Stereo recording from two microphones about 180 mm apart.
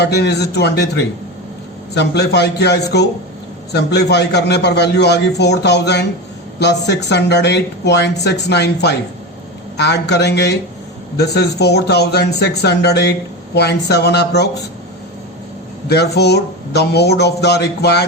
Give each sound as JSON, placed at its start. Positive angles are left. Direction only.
{"t": 0.0, "sound": "a man's voice", "side_deg": 70}
{"t": 15.9, "sound": "speech", "side_deg": 65}